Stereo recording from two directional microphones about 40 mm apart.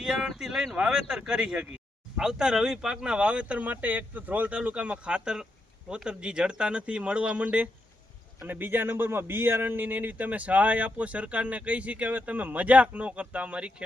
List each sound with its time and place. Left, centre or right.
0.0 s speech: centre; by 3.6 s right
3.6 s speech: right
8.4 s speech: right